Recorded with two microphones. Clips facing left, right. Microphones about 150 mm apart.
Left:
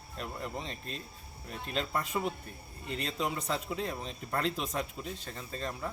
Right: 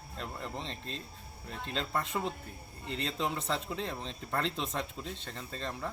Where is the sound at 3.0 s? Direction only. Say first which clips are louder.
Even; 25° right (ahead or behind).